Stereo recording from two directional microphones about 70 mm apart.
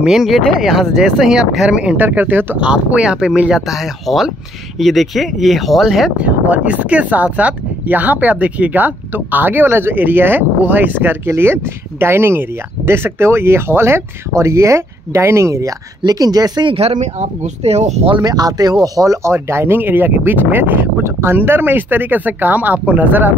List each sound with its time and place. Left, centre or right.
0.2 s speech: centre
2.0 s speech: right
2.6 s speech: centre
6.1 s speech: centre; by 15.7 s right
16.1 s speech: right
18.2 s speech: right